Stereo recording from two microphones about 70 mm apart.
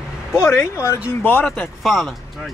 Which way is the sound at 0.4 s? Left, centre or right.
Left.